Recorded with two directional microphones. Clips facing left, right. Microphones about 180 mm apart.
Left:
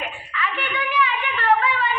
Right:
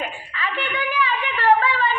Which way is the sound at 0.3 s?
35° right (ahead or behind).